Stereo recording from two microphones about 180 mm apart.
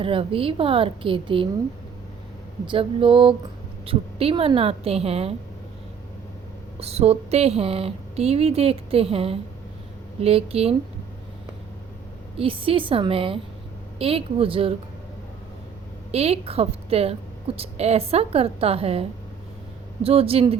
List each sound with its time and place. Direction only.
0.0 s speech: 30° right (ahead or behind)
2.6 s a sound: 30° right (ahead or behind)
3.8 s speech: 30° right (ahead or behind)
6.7 s speech: 35° right (ahead or behind)
12.4 s speech: 30° right (ahead or behind)
16.1 s speech: 35° right (ahead or behind)